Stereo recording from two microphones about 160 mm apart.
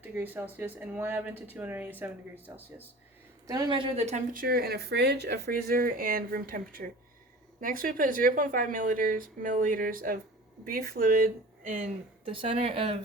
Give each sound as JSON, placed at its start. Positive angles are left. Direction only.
{"t": 0.0, "sound": "speech", "side_deg": -10}
{"t": 3.4, "sound": "a woman's voice", "side_deg": -25}
{"t": 4.3, "sound": "speech", "side_deg": -65}
{"t": 12.3, "sound": "a woman's voice", "side_deg": -35}